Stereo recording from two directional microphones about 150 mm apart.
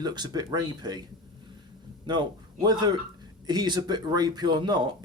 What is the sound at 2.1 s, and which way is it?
A man's voice, 30° right (ahead or behind).